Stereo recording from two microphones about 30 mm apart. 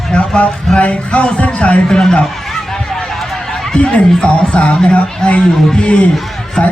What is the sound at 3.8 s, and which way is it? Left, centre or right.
A man's voice, left.